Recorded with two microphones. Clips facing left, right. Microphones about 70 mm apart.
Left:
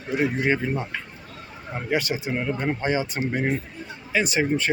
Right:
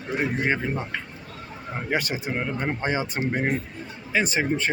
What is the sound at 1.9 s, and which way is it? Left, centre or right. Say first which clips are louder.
Speech: left 2 dB; right.